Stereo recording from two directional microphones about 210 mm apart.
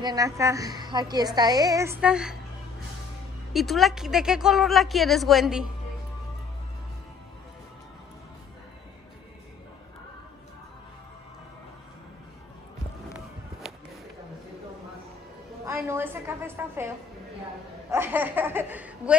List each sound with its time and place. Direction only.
0.0 s a woman's voice: 15° right (ahead or behind)
3.5 s speech: centre (ahead or behind)
15.6 s a sound: 10° right (ahead or behind)
17.9 s speech: 10° right (ahead or behind)